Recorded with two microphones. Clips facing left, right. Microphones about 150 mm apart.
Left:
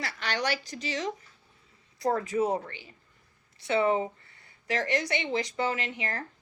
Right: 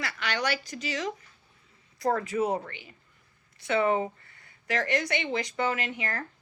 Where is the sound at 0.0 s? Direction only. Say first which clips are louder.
Even; 35° left (ahead or behind).